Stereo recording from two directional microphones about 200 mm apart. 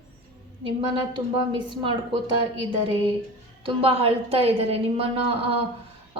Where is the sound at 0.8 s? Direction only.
25° right (ahead or behind).